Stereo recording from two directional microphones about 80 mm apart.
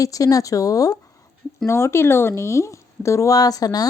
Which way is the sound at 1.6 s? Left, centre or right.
Left.